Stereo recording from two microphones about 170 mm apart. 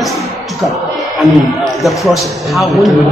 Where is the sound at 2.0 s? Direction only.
Centre (ahead or behind).